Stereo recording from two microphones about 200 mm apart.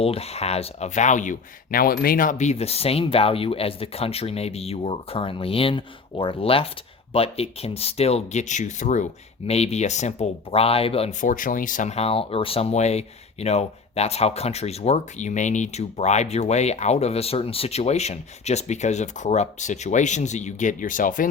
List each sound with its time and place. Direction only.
0.0 s speech: 30° left (ahead or behind)